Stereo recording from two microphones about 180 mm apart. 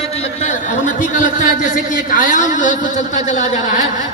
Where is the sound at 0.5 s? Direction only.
45° left (ahead or behind).